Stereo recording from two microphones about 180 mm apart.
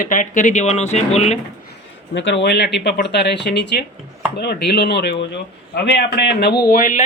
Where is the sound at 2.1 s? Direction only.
80° left.